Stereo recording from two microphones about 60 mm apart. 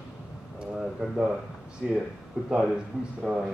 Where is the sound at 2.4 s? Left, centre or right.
Centre.